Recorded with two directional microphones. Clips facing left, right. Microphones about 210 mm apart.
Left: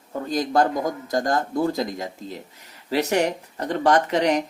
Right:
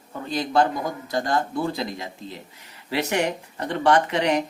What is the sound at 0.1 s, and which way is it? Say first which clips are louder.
A man's voice: left 2 dB; 40° left (ahead or behind).